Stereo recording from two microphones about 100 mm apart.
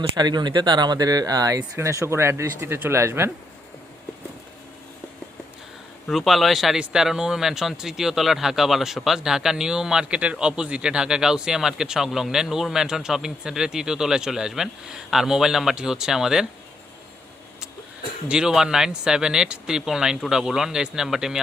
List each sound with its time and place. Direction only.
0.2 s speech: 45° right (ahead or behind); by 3.3 s 25° right (ahead or behind)
6.1 s speech: centre (ahead or behind)
18.3 s speech: 5° right (ahead or behind)